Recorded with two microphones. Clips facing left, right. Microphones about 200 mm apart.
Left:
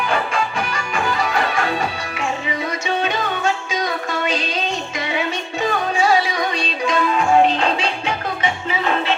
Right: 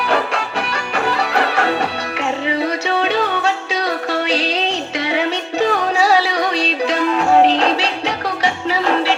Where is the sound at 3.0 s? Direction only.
65° right (ahead or behind).